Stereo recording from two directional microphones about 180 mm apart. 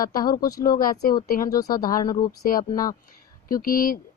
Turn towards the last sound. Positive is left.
turn(degrees=50)  # may be behind; listen again after turning